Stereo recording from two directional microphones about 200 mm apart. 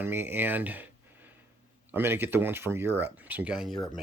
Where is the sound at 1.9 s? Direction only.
10° right (ahead or behind).